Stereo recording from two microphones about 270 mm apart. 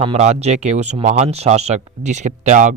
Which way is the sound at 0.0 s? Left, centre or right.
Right.